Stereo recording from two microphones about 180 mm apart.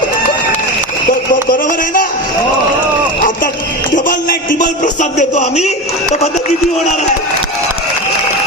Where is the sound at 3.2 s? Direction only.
50° left (ahead or behind).